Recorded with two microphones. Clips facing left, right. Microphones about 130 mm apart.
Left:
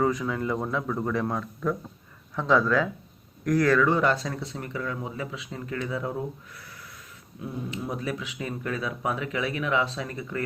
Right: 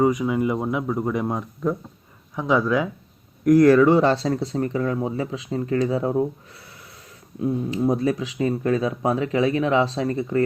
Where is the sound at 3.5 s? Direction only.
25° right (ahead or behind).